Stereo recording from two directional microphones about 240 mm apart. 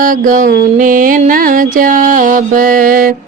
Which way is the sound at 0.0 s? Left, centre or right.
Right.